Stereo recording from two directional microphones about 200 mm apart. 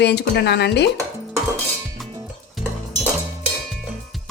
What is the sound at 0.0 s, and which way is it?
Speech, 55° left (ahead or behind).